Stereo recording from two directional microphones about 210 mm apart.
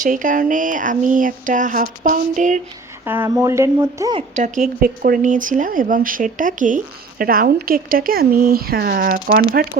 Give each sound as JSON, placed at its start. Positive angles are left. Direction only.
{"t": 0.0, "sound": "speech", "side_deg": -40}
{"t": 3.0, "sound": "speech", "side_deg": -10}
{"t": 4.4, "sound": "speech", "side_deg": -35}